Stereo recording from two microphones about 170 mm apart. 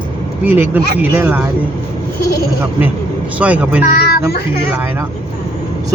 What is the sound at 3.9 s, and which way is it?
Speech, 65° left (ahead or behind).